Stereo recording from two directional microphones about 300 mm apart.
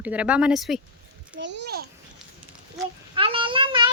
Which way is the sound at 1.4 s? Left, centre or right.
Right.